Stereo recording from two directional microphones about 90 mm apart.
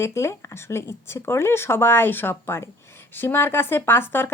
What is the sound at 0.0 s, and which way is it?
A woman's voice, 30° left (ahead or behind).